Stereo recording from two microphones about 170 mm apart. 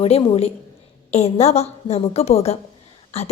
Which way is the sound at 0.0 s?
35° left (ahead or behind).